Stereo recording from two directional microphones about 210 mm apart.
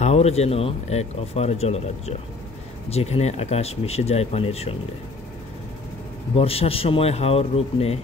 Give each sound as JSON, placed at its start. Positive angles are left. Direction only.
{"t": 0.0, "sound": "speech", "side_deg": 30}
{"t": 6.3, "sound": "speech", "side_deg": 25}